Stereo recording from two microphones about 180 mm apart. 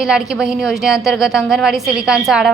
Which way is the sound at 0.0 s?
Centre (ahead or behind).